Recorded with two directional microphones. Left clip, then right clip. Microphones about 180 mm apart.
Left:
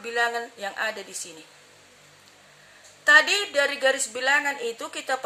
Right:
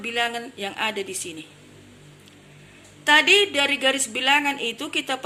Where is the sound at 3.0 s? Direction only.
35° left (ahead or behind).